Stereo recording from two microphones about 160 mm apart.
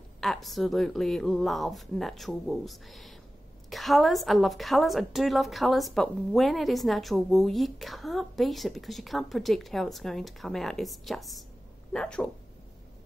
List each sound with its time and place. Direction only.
0.2 s a woman's voice: centre (ahead or behind)